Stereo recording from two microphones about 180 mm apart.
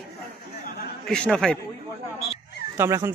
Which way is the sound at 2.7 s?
15° right (ahead or behind).